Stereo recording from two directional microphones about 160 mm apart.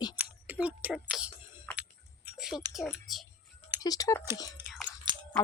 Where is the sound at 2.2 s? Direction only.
5° right (ahead or behind).